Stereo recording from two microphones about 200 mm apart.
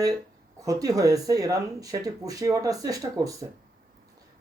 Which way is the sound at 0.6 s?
15° right (ahead or behind).